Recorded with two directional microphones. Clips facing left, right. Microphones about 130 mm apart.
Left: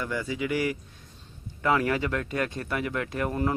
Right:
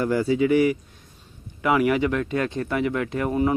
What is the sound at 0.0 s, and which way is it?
Speech, 35° right (ahead or behind).